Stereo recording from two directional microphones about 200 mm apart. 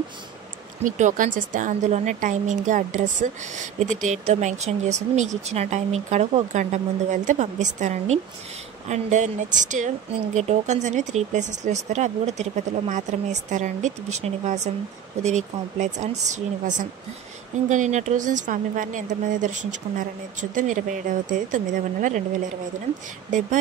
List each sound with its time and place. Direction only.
0.8 s a woman's voice: 40° right (ahead or behind)